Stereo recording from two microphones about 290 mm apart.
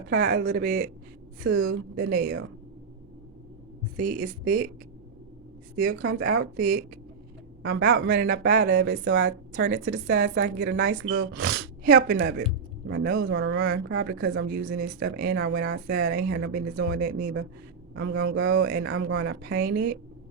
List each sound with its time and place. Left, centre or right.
0.1 s speech: right
3.9 s speech: right
5.7 s speech: right